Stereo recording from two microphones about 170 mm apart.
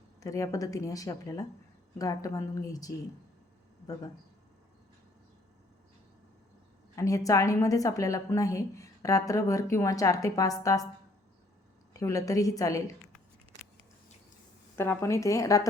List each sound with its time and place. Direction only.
0.2 s a woman's voice: 20° left (ahead or behind)
6.9 s a woman's voice: 20° left (ahead or behind)
11.9 s a woman's voice: 20° left (ahead or behind)
14.8 s a woman's voice: 15° left (ahead or behind)